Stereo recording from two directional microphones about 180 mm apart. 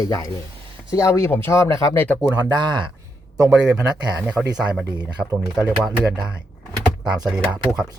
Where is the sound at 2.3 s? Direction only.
15° right (ahead or behind).